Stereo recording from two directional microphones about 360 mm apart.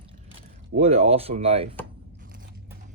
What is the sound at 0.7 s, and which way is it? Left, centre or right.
Speech, centre.